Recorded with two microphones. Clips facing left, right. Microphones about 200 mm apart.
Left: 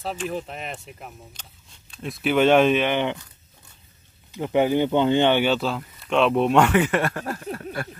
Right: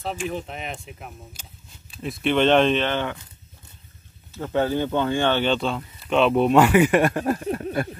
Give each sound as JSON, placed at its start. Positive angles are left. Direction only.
{"t": 0.3, "sound": "speech", "side_deg": 0}
{"t": 4.3, "sound": "speech", "side_deg": 15}